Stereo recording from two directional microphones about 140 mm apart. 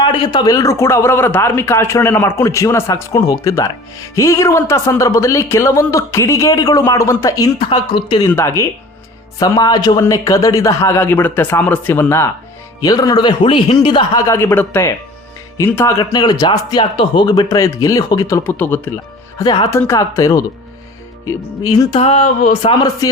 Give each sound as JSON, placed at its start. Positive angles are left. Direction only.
{"t": 0.0, "sound": "a man's voice", "side_deg": 35}
{"t": 7.9, "sound": "speech", "side_deg": 40}
{"t": 8.3, "sound": "a man's voice", "side_deg": 20}
{"t": 16.1, "sound": "a man's voice", "side_deg": 30}
{"t": 19.4, "sound": "a man's voice", "side_deg": 30}
{"t": 21.9, "sound": "speech", "side_deg": 40}